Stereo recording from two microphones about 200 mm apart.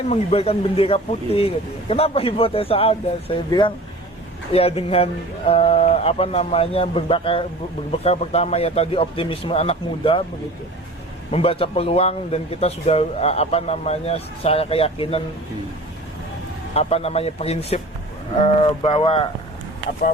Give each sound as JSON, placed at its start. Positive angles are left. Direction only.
{"t": 0.1, "sound": "a man's voice", "side_deg": 30}
{"t": 11.3, "sound": "a man's voice", "side_deg": 30}
{"t": 16.7, "sound": "a man's voice", "side_deg": 30}